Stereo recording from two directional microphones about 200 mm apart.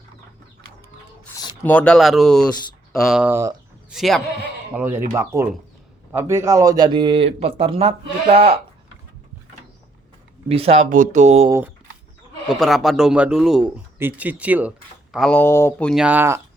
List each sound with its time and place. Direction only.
1.6 s speech: 5° left (ahead or behind); by 3.5 s 10° right (ahead or behind)
3.9 s a man's voice: centre (ahead or behind); by 7.9 s 30° right (ahead or behind)
10.5 s speech: 30° right (ahead or behind)
12.5 s speech: centre (ahead or behind)
15.1 s speech: 5° left (ahead or behind)
15.9 s speech: 5° right (ahead or behind)